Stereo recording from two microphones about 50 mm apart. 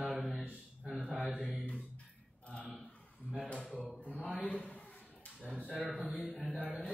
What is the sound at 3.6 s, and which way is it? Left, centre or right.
Speech, centre.